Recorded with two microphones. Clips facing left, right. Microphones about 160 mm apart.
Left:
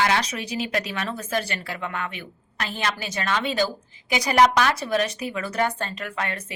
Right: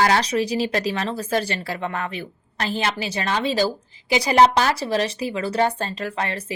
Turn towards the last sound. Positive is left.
turn(degrees=-30)  # may be behind; listen again after turning